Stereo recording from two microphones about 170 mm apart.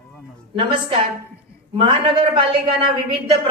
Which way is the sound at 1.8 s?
30° right (ahead or behind).